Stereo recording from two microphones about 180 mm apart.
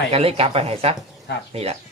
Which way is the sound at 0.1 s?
35° right (ahead or behind).